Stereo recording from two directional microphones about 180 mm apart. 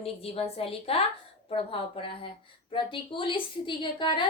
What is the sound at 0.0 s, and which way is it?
A woman's voice, 35° left (ahead or behind).